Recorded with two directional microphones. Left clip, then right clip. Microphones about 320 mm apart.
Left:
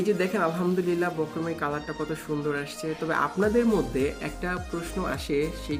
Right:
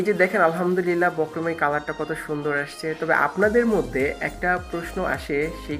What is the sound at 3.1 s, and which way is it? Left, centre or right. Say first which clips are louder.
Speech: right 6 dB; centre.